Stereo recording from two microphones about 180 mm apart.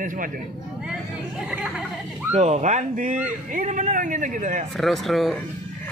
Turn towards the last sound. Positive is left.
turn(degrees=0)  # may be behind; listen again after turning